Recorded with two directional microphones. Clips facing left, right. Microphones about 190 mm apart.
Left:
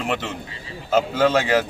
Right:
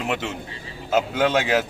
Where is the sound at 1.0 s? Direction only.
15° right (ahead or behind).